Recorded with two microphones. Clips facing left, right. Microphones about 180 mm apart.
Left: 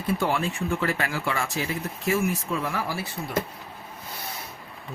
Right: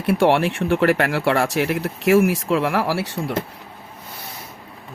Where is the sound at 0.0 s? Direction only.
75° right (ahead or behind); by 3.3 s 90° right.